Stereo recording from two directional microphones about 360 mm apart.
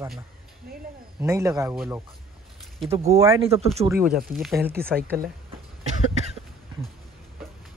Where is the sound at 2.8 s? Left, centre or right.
Centre.